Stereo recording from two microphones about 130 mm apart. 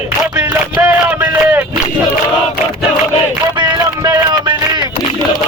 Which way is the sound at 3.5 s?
35° right (ahead or behind).